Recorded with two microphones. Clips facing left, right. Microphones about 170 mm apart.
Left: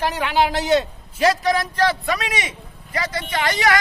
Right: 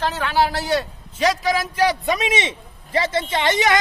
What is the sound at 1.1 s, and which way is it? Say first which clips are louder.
A man's voice: left 2 dB; centre (ahead or behind).